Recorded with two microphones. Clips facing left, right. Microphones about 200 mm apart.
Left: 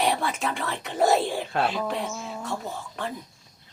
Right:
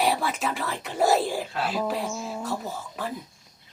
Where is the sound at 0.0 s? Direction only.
Centre (ahead or behind).